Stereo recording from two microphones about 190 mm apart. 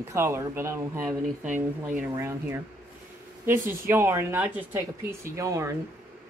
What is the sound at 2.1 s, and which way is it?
Speech, 15° right (ahead or behind).